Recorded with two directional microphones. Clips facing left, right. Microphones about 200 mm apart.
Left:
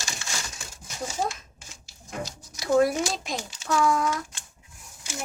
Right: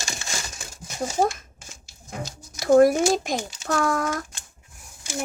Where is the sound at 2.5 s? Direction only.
45° right (ahead or behind).